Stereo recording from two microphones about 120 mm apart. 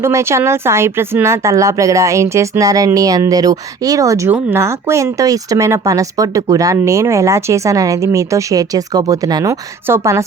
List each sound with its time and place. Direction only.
0.0 s speech: 20° right (ahead or behind)